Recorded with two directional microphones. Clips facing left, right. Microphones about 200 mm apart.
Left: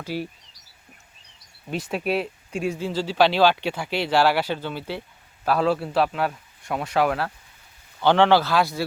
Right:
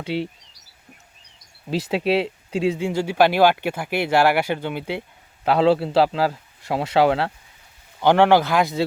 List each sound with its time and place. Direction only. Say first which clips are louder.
0.0 s a man's voice: right 4 dB; 25° right (ahead or behind)
2.2 s a man's voice: right 5 dB; 25° right (ahead or behind)
8.0 s speech: right 2 dB; 10° right (ahead or behind)